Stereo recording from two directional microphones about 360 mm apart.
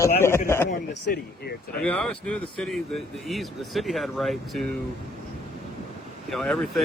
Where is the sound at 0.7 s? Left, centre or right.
Left.